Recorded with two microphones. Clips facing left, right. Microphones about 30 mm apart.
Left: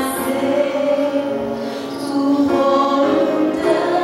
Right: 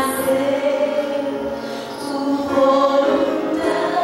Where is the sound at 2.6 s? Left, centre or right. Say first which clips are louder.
Even; centre.